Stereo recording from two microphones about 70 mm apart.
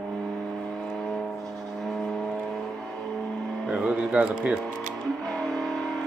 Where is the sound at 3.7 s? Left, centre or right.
Centre.